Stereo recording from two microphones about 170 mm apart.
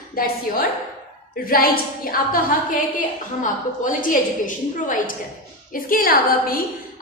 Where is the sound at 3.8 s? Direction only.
50° left (ahead or behind).